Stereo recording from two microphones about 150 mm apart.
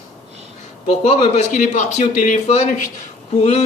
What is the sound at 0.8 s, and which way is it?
A man's voice, 45° left (ahead or behind).